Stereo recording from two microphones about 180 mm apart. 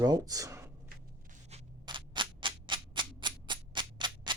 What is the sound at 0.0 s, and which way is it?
Speech, 20° right (ahead or behind).